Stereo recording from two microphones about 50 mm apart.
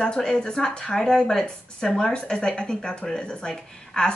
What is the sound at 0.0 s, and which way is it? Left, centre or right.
Speech, centre.